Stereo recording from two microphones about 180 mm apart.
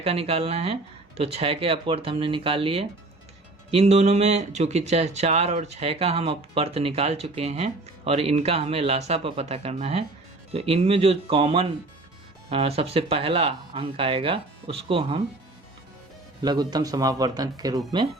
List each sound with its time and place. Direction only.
0.0 s speech: 35° right (ahead or behind)
16.4 s a man's voice: 20° right (ahead or behind)